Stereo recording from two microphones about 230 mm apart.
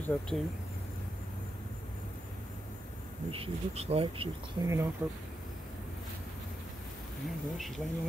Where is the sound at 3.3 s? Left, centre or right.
Right.